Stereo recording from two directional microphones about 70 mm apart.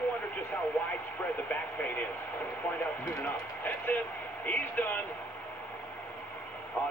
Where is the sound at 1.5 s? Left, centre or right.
Left.